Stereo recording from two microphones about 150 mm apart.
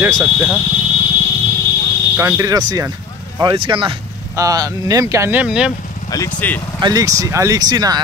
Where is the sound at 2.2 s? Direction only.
20° right (ahead or behind); by 3.9 s 35° right (ahead or behind).